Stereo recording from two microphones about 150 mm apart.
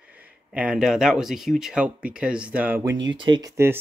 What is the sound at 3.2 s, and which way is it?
Speech, 30° right (ahead or behind).